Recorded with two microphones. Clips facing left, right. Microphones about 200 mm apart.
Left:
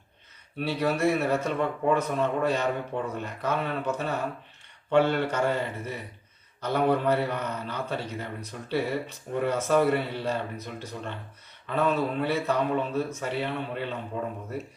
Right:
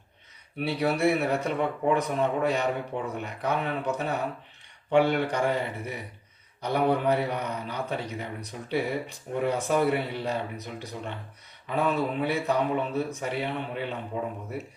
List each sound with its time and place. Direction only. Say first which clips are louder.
0.6 s a man's voice: even; 15° right (ahead or behind)